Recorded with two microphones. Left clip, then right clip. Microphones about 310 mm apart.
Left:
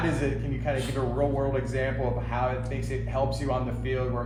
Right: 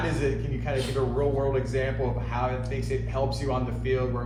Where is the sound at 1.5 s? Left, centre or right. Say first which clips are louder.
Right 1 dB; left.